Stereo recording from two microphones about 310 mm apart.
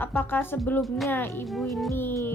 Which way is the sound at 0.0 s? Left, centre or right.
Centre.